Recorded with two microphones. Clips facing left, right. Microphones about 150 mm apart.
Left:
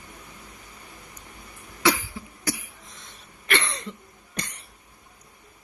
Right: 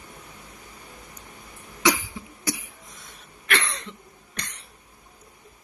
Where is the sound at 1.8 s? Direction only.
20° right (ahead or behind).